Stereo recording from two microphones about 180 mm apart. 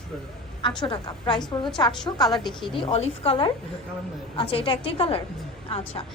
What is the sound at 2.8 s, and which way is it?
A woman's voice, 30° left (ahead or behind).